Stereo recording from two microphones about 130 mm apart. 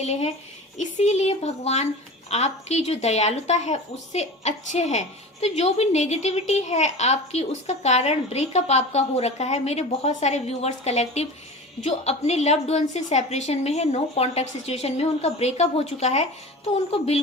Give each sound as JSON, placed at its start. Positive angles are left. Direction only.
{"t": 0.0, "sound": "a woman's voice", "side_deg": 55}